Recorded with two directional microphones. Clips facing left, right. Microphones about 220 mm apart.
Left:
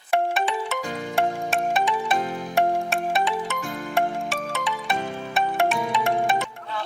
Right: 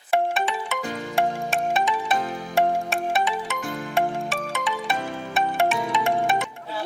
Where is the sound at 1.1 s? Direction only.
Centre (ahead or behind).